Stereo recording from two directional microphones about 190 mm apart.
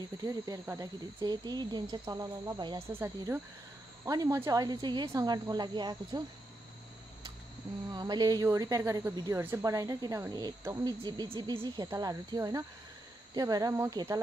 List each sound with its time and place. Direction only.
0.2 s speech: 20° right (ahead or behind)
7.9 s speech: 20° right (ahead or behind)